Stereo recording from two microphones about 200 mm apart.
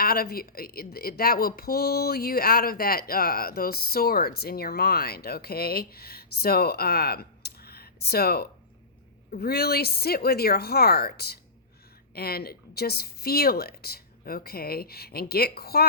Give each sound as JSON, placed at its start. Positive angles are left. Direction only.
{"t": 0.0, "sound": "speech", "side_deg": 50}